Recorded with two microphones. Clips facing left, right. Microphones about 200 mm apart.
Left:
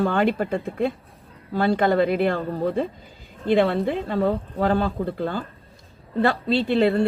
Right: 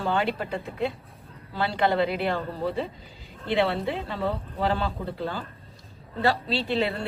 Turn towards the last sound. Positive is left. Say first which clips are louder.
# left 7 dB
turn(degrees=55)  # may be behind; listen again after turning